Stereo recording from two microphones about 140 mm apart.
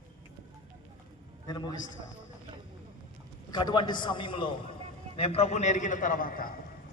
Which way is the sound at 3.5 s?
30° left (ahead or behind).